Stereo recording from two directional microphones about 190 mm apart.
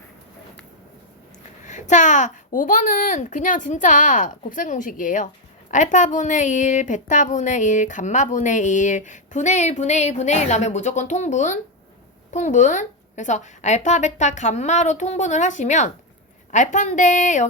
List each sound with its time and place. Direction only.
1.6 s a woman's voice: 40° left (ahead or behind)